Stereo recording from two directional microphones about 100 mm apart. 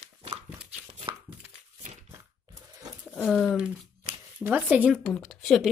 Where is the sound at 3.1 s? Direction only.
10° left (ahead or behind).